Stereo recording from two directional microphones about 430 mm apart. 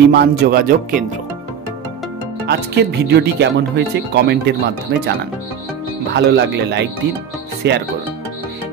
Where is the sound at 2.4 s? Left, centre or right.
Right.